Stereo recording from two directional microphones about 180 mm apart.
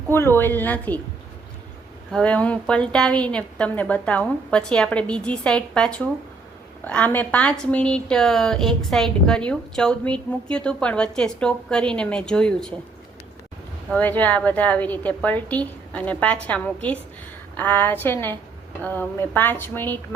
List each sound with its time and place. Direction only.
0.1 s a woman's voice: 15° left (ahead or behind)
2.1 s a woman's voice: 5° left (ahead or behind)
13.9 s a woman's voice: 10° left (ahead or behind)